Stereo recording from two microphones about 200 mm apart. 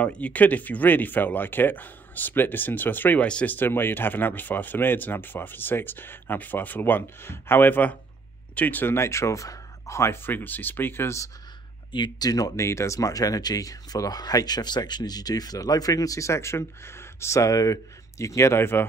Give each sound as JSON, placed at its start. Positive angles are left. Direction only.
{"t": 0.0, "sound": "speech", "side_deg": 5}